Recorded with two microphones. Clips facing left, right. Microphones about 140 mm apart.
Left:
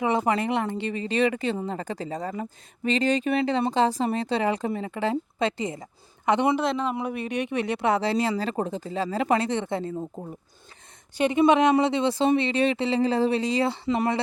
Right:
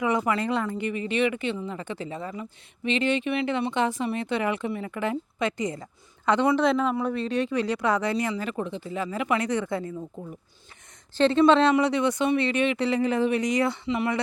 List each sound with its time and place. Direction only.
0.0 s speech: 30° left (ahead or behind)
6.6 s a man's voice: centre (ahead or behind)
6.9 s speech: 15° left (ahead or behind)
11.2 s speech: 15° left (ahead or behind)
13.8 s speech: 40° left (ahead or behind)